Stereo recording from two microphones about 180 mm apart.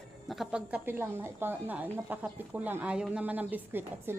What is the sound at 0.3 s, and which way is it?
Speech, 5° right (ahead or behind).